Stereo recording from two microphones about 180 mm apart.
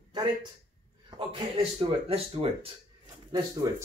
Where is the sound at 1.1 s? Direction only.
30° right (ahead or behind).